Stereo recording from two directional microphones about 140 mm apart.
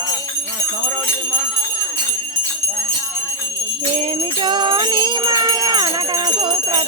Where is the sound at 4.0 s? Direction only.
40° right (ahead or behind).